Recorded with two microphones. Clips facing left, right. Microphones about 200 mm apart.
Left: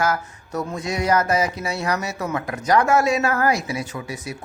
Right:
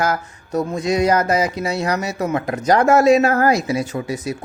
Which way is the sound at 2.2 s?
35° right (ahead or behind).